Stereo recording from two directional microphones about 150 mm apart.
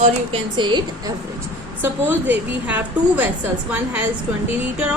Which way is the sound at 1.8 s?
10° right (ahead or behind).